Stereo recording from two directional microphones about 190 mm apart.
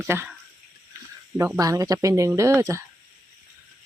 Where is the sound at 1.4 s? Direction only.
15° right (ahead or behind).